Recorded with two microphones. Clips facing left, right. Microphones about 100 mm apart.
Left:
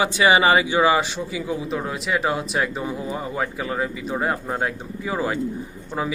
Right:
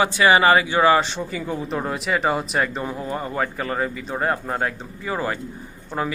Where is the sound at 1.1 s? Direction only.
5° left (ahead or behind).